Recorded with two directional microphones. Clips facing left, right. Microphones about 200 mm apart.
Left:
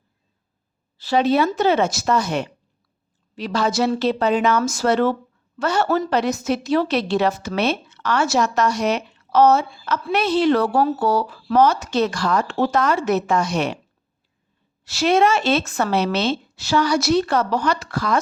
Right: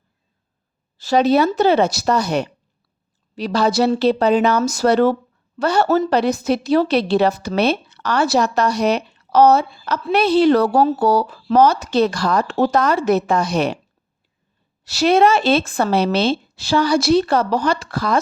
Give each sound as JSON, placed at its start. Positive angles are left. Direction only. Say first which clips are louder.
{"t": 0.9, "sound": "a woman's voice", "louder": "right 3 dB", "side_deg": -45}
{"t": 14.8, "sound": "a woman's voice", "louder": "right 3 dB", "side_deg": -35}